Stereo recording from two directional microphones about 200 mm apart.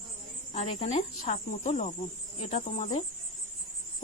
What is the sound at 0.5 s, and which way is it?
Speech, 30° left (ahead or behind).